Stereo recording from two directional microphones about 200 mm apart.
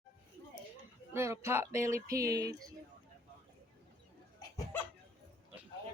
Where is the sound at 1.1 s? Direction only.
15° right (ahead or behind).